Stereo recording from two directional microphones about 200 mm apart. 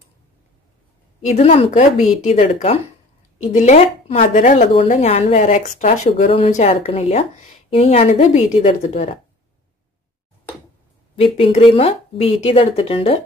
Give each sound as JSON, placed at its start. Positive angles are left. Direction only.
{"t": 1.3, "sound": "speech", "side_deg": 30}
{"t": 11.1, "sound": "speech", "side_deg": 30}